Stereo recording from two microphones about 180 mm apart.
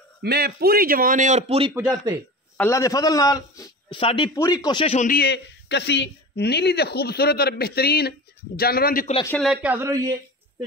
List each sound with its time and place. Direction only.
0.2 s a man's voice: 60° right (ahead or behind); by 1.7 s 35° right (ahead or behind)
2.5 s a man's voice: 15° left (ahead or behind)
4.9 s a man's voice: 45° left (ahead or behind)
5.2 s speech: 70° left (ahead or behind)
9.4 s a man's voice: 5° right (ahead or behind)